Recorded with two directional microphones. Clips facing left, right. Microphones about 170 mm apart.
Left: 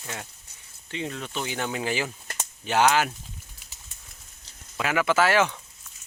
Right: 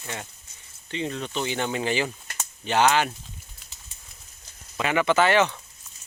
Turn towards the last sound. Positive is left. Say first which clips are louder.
# right 1 dB
turn(degrees=10)  # may be behind; listen again after turning